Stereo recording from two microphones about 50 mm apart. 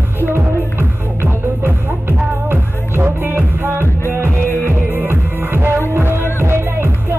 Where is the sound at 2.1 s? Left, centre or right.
Right.